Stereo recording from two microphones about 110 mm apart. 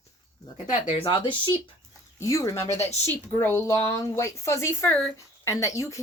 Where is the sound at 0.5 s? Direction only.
90° left.